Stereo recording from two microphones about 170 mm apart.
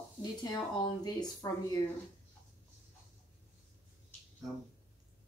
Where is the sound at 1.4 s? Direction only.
20° left (ahead or behind).